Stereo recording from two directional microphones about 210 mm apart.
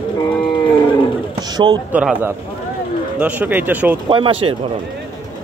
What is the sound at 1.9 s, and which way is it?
Speech, 5° right (ahead or behind).